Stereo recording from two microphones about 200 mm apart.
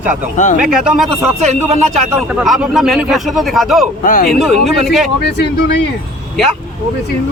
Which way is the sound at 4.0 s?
45° left (ahead or behind).